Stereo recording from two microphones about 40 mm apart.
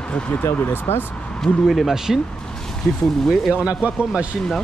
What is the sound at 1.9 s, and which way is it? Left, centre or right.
Speech, centre.